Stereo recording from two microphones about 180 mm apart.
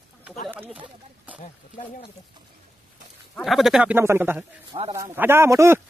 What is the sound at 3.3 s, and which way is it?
Speech, centre (ahead or behind).